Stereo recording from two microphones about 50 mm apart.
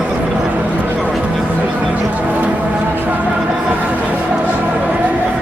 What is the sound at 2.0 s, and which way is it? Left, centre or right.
Music, right.